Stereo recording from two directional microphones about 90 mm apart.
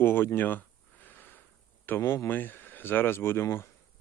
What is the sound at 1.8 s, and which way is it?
Speech, 25° left (ahead or behind).